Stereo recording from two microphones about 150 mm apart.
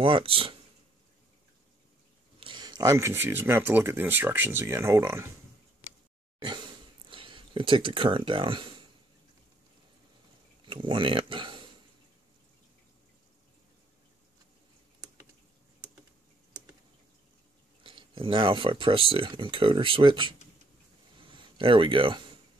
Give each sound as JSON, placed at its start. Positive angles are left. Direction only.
{"t": 0.0, "sound": "speech", "side_deg": -35}
{"t": 2.4, "sound": "speech", "side_deg": -30}
{"t": 6.4, "sound": "a sound", "side_deg": -30}
{"t": 10.6, "sound": "speech", "side_deg": -35}
{"t": 17.8, "sound": "speech", "side_deg": -35}